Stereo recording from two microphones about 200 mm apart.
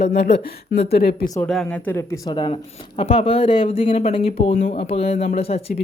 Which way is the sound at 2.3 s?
20° left (ahead or behind).